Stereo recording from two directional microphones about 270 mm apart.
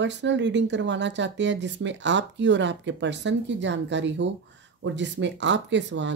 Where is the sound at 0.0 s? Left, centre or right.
Right.